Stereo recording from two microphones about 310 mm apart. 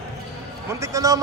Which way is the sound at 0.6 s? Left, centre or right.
Centre.